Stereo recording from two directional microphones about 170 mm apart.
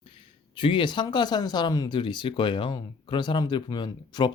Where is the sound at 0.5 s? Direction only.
30° left (ahead or behind).